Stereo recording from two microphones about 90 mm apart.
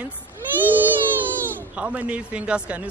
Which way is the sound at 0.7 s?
20° right (ahead or behind).